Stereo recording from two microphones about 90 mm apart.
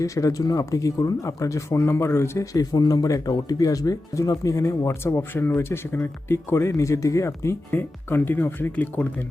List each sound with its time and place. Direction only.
0.0 s speech: 35° left (ahead or behind)